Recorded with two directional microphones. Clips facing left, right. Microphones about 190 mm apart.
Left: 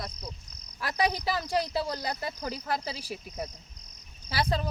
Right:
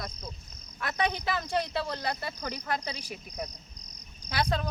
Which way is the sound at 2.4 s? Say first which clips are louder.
Left 1 dB; 5° left (ahead or behind).